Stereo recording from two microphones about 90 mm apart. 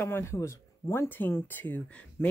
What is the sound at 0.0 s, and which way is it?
Speech, 30° left (ahead or behind).